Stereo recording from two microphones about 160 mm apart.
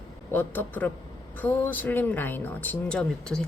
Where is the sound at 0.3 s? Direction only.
10° left (ahead or behind).